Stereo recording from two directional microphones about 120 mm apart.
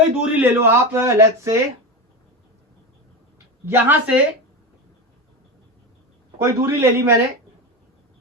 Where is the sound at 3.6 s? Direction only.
15° right (ahead or behind).